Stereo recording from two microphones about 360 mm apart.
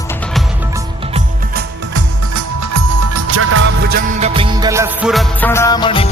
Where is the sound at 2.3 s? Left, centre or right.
Right.